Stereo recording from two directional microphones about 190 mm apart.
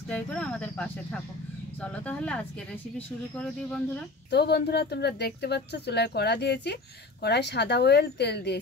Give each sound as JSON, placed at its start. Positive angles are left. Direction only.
{"t": 0.1, "sound": "speech", "side_deg": 5}
{"t": 4.3, "sound": "speech", "side_deg": 60}